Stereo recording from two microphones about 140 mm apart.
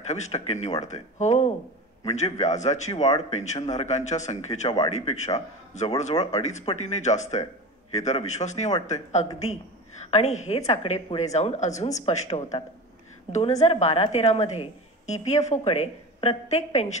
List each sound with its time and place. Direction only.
0.0 s a man's voice: 55° left (ahead or behind)